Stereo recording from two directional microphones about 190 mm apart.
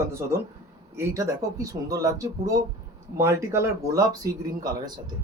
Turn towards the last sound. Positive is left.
turn(degrees=-20)  # may be behind; listen again after turning